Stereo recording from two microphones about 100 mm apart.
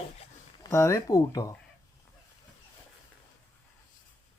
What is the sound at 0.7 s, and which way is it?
Speech, 30° left (ahead or behind).